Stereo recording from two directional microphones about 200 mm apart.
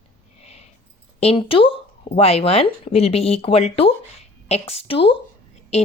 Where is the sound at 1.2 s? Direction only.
30° left (ahead or behind).